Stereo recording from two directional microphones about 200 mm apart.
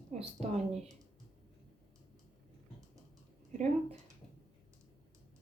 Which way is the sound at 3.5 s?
35° right (ahead or behind).